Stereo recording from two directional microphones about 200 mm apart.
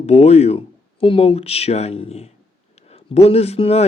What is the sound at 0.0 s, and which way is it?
Speech, 30° left (ahead or behind).